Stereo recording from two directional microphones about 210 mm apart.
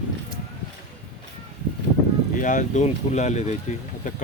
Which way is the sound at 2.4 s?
40° left (ahead or behind).